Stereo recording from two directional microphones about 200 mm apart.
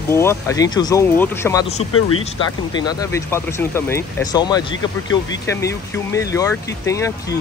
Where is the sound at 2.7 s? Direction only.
20° left (ahead or behind).